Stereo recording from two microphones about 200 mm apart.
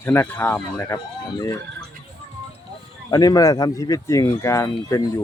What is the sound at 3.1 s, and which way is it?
Speech, 20° left (ahead or behind).